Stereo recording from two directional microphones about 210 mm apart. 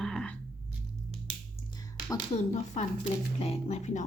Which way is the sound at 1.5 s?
20° left (ahead or behind).